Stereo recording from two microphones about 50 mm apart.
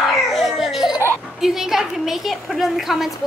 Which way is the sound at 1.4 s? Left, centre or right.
Centre.